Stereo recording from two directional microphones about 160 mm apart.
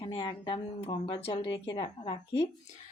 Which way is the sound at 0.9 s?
35° left (ahead or behind).